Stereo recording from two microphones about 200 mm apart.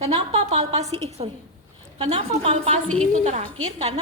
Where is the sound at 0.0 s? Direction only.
30° right (ahead or behind).